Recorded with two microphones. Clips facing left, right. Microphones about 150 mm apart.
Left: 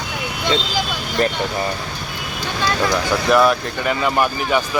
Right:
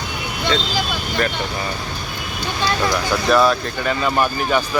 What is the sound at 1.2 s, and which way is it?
Speech, 30° left (ahead or behind).